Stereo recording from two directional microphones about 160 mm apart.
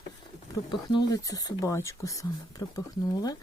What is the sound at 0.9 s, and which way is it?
Speech, 25° left (ahead or behind).